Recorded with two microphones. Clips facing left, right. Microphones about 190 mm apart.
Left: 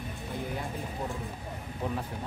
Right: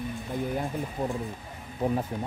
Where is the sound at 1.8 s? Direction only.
45° right (ahead or behind).